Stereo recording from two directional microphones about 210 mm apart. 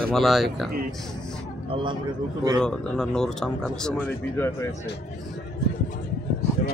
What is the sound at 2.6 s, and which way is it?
Speech, 5° left (ahead or behind).